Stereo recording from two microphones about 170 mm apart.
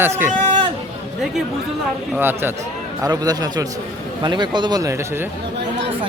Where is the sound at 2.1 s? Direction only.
10° right (ahead or behind).